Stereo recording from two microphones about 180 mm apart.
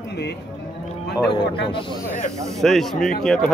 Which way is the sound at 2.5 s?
Centre (ahead or behind).